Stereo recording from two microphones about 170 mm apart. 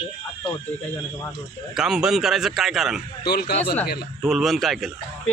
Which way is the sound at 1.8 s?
5° right (ahead or behind).